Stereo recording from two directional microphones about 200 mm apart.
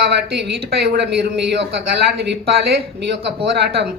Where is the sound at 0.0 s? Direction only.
55° right (ahead or behind).